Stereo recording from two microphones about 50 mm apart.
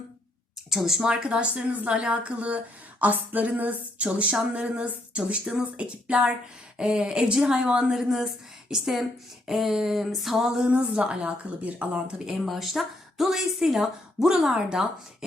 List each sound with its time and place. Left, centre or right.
0.7 s a woman's voice: centre
1.0 s a woman's voice: centre
10.9 s speech: right
12.5 s a woman's voice: centre